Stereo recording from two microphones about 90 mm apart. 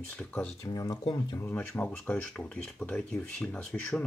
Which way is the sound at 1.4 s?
25° left (ahead or behind).